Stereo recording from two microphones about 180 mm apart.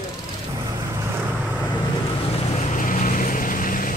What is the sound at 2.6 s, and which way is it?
Vehicle, 45° left (ahead or behind).